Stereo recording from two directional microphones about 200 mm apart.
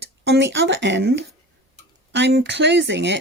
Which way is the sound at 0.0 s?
60° right (ahead or behind).